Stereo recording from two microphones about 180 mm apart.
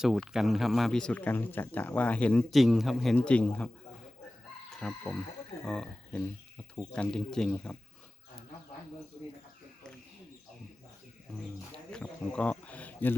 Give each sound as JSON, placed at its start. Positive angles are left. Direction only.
{"t": 0.0, "sound": "speech", "side_deg": 0}
{"t": 4.7, "sound": "speech", "side_deg": 5}
{"t": 11.9, "sound": "speech", "side_deg": 5}